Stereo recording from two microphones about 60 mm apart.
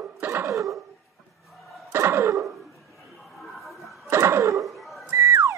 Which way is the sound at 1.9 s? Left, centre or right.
Right.